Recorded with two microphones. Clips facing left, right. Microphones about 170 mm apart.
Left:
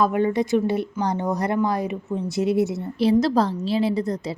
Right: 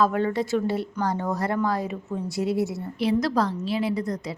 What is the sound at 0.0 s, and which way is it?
A woman's voice, 15° left (ahead or behind).